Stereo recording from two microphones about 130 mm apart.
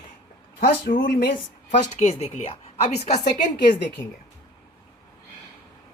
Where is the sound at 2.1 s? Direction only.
55° left (ahead or behind).